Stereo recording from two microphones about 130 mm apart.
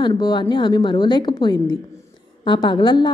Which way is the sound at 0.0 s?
30° left (ahead or behind).